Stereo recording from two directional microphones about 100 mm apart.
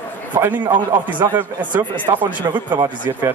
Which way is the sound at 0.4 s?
20° right (ahead or behind).